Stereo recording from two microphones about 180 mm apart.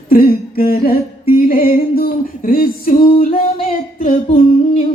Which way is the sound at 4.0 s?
35° left (ahead or behind).